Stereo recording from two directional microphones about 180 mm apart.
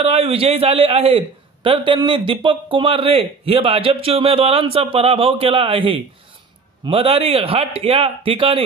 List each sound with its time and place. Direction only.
0.0 s a man's voice: 35° right (ahead or behind)